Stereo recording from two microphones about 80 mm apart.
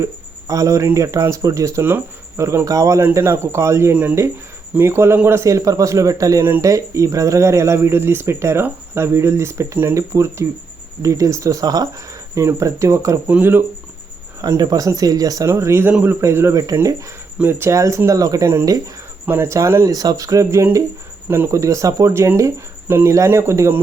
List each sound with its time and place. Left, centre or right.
0.0 s speech: right
3.0 s speech: right
5.4 s speech: right
12.5 s speech: right
13.2 s speech: right
14.4 s speech: right
15.4 s speech: right
15.8 s speech: right
16.2 s speech: right
17.7 s speech: right
19.2 s speech: right